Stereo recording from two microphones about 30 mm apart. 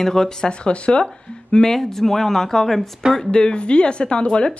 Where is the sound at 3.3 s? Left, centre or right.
Left.